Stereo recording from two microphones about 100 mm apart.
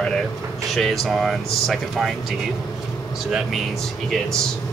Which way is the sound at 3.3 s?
5° right (ahead or behind).